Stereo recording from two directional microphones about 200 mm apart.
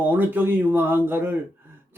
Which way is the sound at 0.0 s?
10° right (ahead or behind).